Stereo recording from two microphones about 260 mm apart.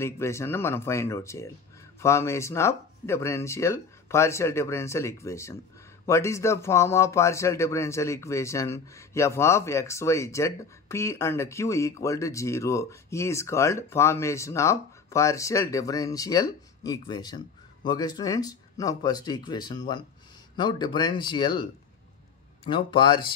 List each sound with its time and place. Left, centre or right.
0.0 s speech: centre
22.7 s speech: centre